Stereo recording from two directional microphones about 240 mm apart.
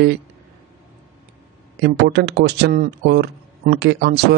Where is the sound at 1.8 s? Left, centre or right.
Right.